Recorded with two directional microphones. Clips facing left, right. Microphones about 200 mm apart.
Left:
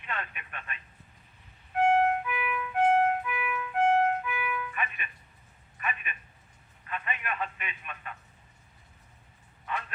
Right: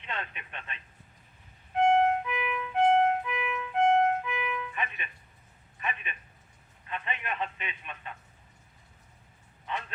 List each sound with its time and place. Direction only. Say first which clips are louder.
0.0 s speech: even; 25° right (ahead or behind)
1.7 s music: right 1 dB; 25° right (ahead or behind)
5.8 s speech: even; 25° right (ahead or behind)